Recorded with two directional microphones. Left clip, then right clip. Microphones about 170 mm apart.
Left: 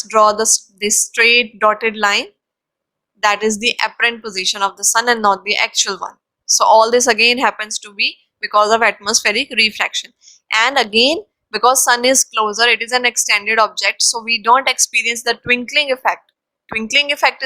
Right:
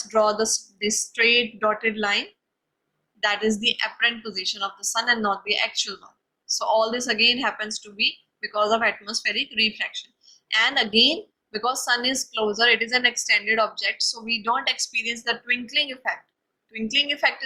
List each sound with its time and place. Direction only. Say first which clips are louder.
0.0 s a woman's voice: left 8 dB; 60° left (ahead or behind)